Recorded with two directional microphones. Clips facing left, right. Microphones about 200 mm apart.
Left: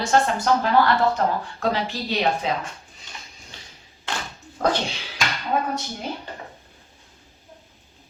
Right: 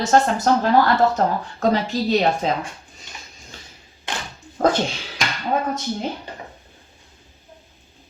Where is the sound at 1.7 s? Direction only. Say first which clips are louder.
Right 6 dB; 40° right (ahead or behind).